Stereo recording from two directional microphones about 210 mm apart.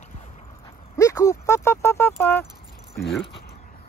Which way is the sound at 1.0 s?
15° left (ahead or behind).